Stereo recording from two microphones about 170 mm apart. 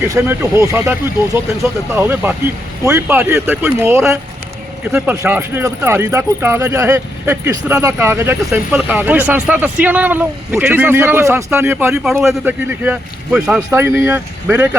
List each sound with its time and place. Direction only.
0.0 s speech: 15° right (ahead or behind)